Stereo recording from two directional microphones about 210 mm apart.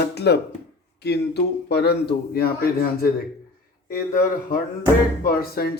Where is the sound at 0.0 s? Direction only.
50° left (ahead or behind).